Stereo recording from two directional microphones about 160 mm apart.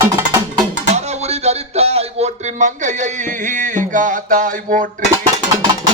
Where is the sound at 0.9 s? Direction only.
45° right (ahead or behind).